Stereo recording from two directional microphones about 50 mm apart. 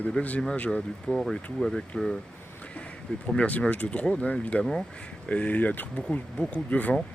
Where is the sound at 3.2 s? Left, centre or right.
Left.